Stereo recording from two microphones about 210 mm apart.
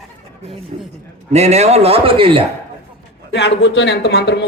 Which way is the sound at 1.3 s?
30° right (ahead or behind).